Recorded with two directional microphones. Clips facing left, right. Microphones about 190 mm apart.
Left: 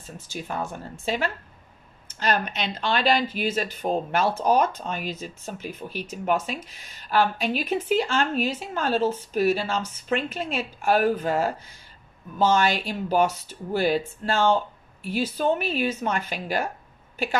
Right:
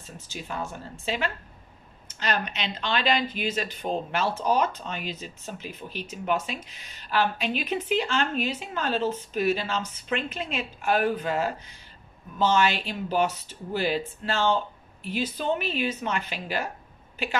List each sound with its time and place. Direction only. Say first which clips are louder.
0.3 s speech: left 3 dB; 45° left (ahead or behind)